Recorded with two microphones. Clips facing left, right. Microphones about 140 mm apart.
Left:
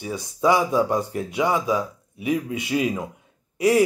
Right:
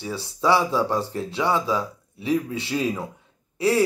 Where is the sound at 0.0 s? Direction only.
15° left (ahead or behind).